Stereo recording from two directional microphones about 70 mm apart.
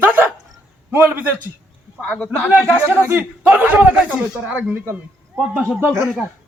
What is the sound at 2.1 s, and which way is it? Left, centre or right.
Speech, left.